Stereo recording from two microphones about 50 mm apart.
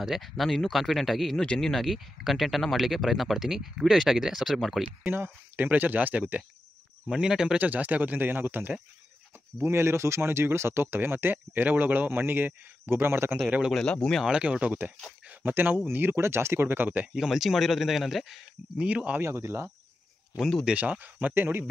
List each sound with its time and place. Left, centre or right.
0.0 s speech: centre
1.4 s speech: centre
5.1 s speech: right
7.1 s speech: centre
7.5 s speech: right
9.6 s speech: right
14.2 s speech: right
15.2 s speech: right
17.1 s speech: centre
18.8 s speech: right
19.2 s speech: right
20.3 s speech: centre
20.7 s speech: right
21.4 s speech: right